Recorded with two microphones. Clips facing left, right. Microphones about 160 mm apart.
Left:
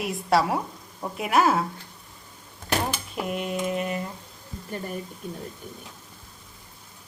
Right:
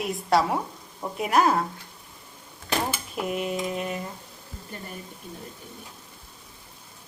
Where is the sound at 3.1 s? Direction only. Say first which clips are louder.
Right 1 dB; centre (ahead or behind).